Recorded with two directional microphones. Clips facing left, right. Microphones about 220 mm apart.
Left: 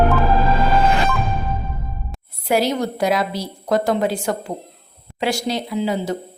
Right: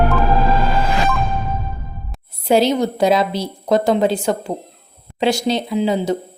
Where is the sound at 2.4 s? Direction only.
25° right (ahead or behind).